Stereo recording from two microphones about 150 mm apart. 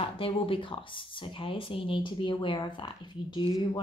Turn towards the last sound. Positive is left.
turn(degrees=30)  # may be behind; listen again after turning